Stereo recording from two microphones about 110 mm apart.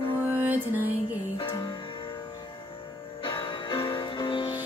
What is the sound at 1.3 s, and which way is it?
Music, 40° left (ahead or behind).